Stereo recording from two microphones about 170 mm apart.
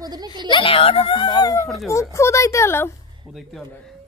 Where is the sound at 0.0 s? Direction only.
25° right (ahead or behind).